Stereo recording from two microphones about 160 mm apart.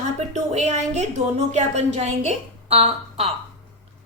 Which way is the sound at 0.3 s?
45° right (ahead or behind).